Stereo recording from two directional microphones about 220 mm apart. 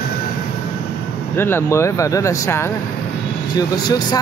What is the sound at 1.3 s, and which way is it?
Speech, 10° left (ahead or behind).